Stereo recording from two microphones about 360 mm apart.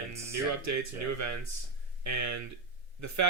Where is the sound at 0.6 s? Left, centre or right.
Right.